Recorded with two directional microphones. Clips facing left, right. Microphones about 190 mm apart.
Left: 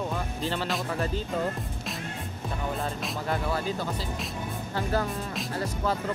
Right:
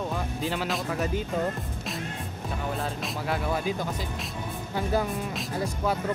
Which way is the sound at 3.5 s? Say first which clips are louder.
Right 1 dB; 15° right (ahead or behind).